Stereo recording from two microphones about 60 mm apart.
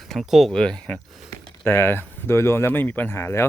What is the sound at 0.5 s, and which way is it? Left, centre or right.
Speech, centre.